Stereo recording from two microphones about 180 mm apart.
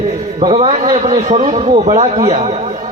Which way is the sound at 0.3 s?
35° right (ahead or behind).